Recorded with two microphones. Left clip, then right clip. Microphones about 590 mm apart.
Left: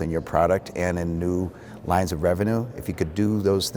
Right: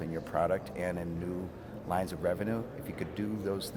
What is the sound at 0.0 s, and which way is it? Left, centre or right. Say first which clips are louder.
Speech: left 10 dB; left.